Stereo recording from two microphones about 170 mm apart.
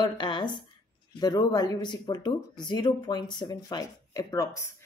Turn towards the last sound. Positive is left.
turn(degrees=15)  # may be behind; listen again after turning